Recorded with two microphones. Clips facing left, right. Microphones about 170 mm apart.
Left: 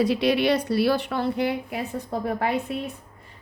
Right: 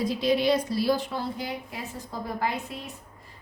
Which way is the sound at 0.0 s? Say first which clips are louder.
Left 3 dB; 70° left (ahead or behind).